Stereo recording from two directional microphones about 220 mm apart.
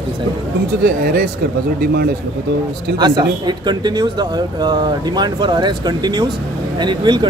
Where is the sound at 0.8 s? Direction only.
40° right (ahead or behind).